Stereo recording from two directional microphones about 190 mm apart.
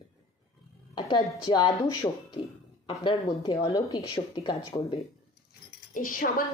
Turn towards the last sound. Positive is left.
turn(degrees=45)  # may be behind; listen again after turning